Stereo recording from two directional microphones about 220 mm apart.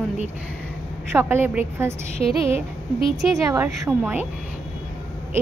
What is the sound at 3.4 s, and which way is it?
Speech, 15° right (ahead or behind).